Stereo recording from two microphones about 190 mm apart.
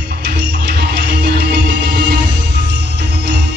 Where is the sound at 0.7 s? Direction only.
60° right (ahead or behind).